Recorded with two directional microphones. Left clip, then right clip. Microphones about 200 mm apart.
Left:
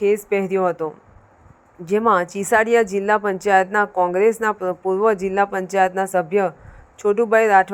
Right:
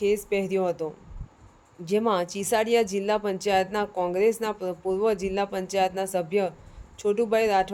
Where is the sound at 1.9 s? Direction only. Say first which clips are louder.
Left 7 dB; 15° left (ahead or behind).